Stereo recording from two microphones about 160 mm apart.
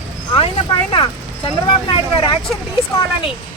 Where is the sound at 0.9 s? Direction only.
30° left (ahead or behind).